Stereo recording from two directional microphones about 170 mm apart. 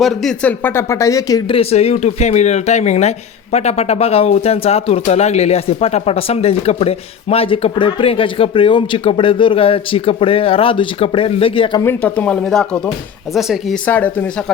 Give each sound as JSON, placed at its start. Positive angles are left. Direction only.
{"t": 0.0, "sound": "speech", "side_deg": 0}
{"t": 1.5, "sound": "speech", "side_deg": 35}
{"t": 11.8, "sound": "speech", "side_deg": 10}
{"t": 13.8, "sound": "speech", "side_deg": 10}